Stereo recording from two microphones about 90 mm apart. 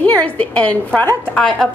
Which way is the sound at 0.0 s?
20° left (ahead or behind).